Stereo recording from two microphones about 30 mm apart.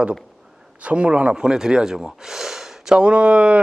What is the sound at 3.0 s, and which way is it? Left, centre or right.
Speech, right.